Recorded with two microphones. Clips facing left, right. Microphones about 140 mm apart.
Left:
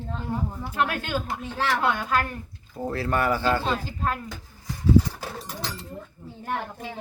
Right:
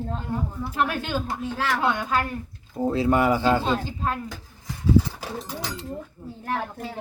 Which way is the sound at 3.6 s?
Centre (ahead or behind).